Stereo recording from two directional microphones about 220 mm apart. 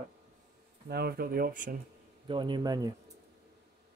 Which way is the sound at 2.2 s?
20° right (ahead or behind).